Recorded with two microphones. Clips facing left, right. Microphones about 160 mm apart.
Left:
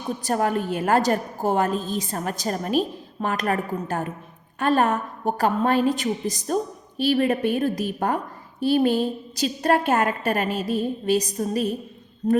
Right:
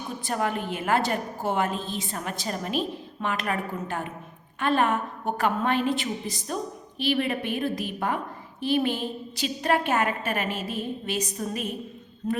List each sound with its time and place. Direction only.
0.2 s a woman's voice: 40° left (ahead or behind)